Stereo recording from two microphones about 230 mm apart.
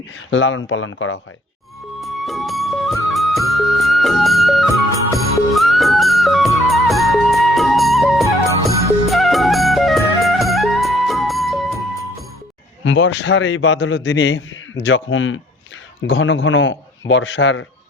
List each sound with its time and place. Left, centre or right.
0.3 s a man's voice: left
2.0 s music: centre
12.8 s a man's voice: left